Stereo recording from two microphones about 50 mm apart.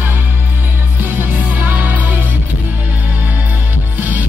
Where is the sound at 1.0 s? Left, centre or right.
Right.